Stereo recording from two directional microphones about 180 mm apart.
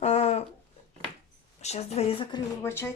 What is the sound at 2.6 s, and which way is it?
Speech, 15° left (ahead or behind).